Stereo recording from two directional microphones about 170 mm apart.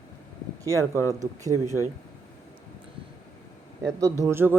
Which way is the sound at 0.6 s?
20° right (ahead or behind).